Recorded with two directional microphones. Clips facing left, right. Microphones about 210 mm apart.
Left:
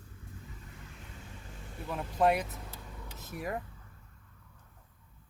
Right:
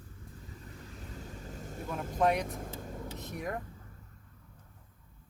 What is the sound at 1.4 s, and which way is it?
Vehicle, 40° right (ahead or behind).